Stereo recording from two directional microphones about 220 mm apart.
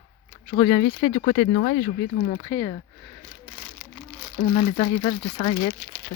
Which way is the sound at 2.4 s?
20° left (ahead or behind).